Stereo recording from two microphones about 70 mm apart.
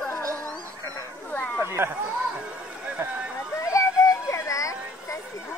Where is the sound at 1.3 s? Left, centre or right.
Left.